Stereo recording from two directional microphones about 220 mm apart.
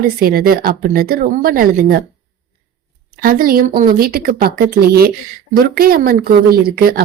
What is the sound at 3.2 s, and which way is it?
A woman's voice, 40° right (ahead or behind).